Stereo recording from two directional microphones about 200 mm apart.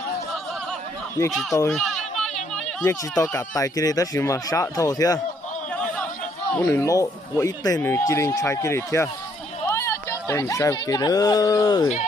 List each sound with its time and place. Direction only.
1.3 s speech: centre (ahead or behind)
1.7 s chatter: centre (ahead or behind)
2.8 s speech: 15° left (ahead or behind)
6.5 s speech: 10° left (ahead or behind)